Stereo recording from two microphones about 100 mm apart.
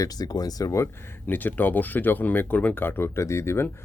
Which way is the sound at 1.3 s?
20° left (ahead or behind).